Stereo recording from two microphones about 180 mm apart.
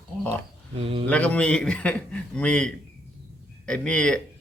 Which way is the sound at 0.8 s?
30° right (ahead or behind).